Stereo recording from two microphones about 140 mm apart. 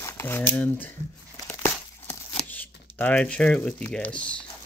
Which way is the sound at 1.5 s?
20° left (ahead or behind).